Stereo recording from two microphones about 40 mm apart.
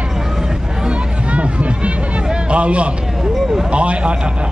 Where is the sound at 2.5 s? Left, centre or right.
Right.